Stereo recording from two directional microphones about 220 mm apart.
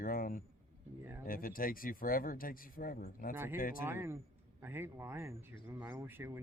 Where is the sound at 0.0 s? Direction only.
40° left (ahead or behind).